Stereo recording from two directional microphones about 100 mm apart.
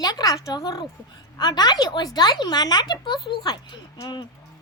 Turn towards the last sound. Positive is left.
turn(degrees=50)  # may be behind; listen again after turning